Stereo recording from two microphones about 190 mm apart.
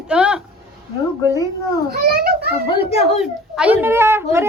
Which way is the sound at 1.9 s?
55° right (ahead or behind).